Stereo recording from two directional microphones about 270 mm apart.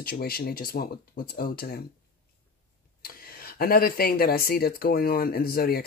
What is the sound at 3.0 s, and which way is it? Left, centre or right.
Speech, left.